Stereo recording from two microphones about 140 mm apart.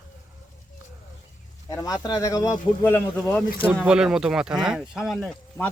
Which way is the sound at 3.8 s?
5° right (ahead or behind).